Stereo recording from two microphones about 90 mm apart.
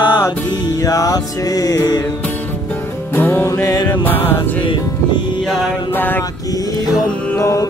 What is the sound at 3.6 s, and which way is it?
Music, 45° left (ahead or behind).